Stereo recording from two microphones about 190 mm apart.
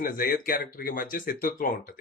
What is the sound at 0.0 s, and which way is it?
Speech, 50° left (ahead or behind).